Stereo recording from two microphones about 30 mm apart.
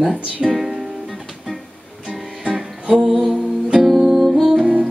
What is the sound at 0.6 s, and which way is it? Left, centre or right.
Music, centre.